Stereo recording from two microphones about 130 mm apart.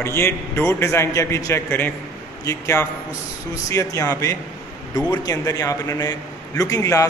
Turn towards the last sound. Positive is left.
turn(degrees=25)  # may be behind; listen again after turning